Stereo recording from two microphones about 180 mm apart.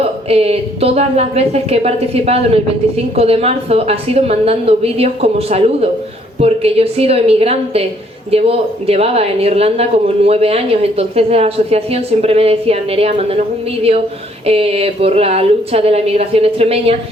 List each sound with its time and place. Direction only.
0.0 s speech: 35° right (ahead or behind)
14.4 s speech: 35° right (ahead or behind)